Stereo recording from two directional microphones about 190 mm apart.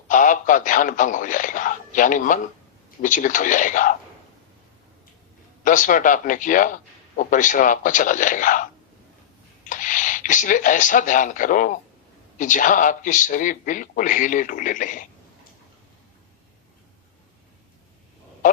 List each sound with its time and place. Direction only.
0.1 s a man's voice: 45° left (ahead or behind)
5.6 s speech: 45° left (ahead or behind)
9.6 s speech: 45° left (ahead or behind)